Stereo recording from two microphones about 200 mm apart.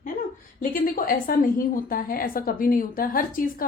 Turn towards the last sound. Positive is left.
turn(degrees=45)  # may be behind; listen again after turning